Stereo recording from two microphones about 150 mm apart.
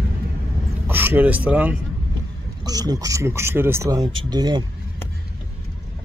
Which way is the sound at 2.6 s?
25° right (ahead or behind).